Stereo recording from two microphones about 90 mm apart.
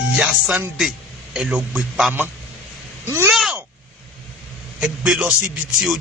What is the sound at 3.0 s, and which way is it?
Speech, 30° right (ahead or behind).